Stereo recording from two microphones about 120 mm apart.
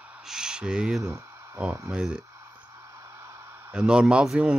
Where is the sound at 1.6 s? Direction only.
20° right (ahead or behind).